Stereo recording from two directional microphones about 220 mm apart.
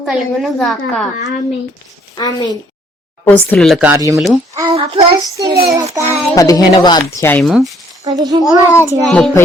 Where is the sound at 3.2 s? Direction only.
5° left (ahead or behind); by 4.1 s 10° right (ahead or behind).